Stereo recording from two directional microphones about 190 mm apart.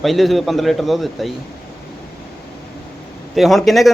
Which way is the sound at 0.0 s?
Centre (ahead or behind).